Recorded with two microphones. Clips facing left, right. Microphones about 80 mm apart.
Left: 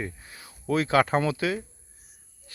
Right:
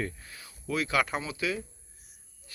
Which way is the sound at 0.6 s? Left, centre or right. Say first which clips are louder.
Left 6 dB; left.